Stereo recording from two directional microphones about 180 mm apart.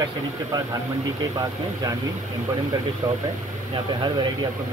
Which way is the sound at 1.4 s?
20° right (ahead or behind).